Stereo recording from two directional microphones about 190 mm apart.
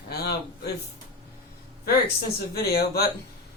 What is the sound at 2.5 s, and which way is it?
Speech, 55° left (ahead or behind).